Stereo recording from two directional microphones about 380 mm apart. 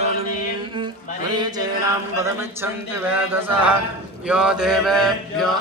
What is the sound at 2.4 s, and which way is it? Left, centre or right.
Mantra, centre.